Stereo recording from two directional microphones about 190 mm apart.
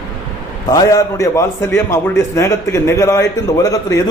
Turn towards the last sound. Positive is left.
turn(degrees=15)  # may be behind; listen again after turning